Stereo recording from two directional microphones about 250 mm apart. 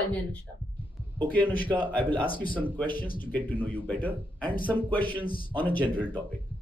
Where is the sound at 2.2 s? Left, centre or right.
Left.